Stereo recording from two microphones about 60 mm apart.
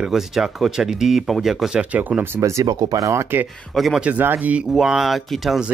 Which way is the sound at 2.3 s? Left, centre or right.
Right.